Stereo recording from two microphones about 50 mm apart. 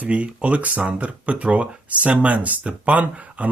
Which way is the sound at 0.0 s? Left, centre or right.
Right.